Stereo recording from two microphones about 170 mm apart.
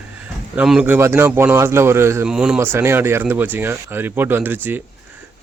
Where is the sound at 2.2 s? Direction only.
5° right (ahead or behind).